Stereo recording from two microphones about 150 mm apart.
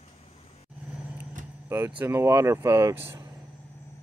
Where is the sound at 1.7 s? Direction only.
15° right (ahead or behind).